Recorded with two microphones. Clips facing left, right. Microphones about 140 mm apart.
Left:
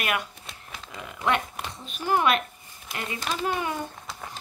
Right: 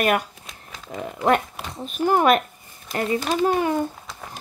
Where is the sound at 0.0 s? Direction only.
40° right (ahead or behind).